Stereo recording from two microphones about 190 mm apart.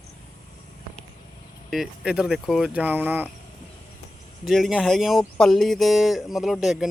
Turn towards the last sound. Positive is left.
turn(degrees=0)  # may be behind; listen again after turning